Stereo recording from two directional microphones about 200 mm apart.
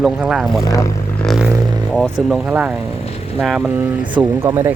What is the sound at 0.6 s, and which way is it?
Speech, 15° left (ahead or behind).